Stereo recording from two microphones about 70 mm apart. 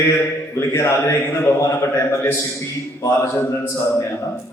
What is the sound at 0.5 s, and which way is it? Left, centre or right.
A man's voice, left.